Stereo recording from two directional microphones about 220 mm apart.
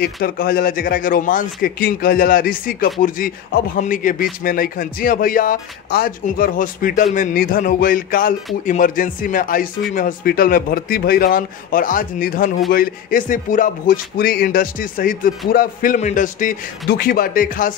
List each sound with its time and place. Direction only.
0.0 s speech: 40° left (ahead or behind)